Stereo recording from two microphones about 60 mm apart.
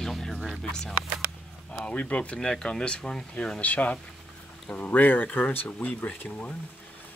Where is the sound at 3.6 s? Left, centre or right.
Left.